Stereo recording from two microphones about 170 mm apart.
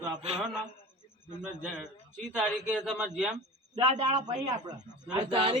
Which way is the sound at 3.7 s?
35° right (ahead or behind).